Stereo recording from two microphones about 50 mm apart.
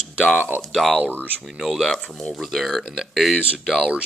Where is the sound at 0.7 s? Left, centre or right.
Centre.